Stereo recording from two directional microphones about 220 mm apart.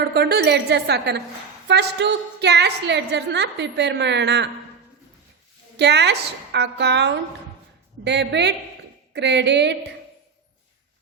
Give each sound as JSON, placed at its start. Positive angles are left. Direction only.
{"t": 0.0, "sound": "a woman's voice", "side_deg": -45}
{"t": 5.7, "sound": "a woman's voice", "side_deg": -50}